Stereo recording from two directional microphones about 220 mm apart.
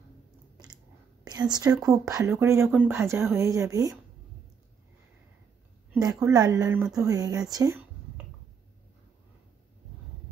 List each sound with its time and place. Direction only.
1.2 s speech: 15° right (ahead or behind)
5.9 s a woman's voice: 15° right (ahead or behind)